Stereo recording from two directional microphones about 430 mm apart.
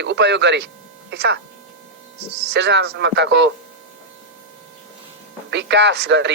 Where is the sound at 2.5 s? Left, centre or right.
Right.